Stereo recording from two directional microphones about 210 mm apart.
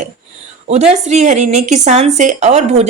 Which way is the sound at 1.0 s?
35° right (ahead or behind).